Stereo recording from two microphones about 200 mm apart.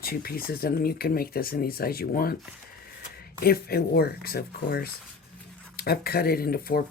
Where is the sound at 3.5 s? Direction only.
50° left (ahead or behind).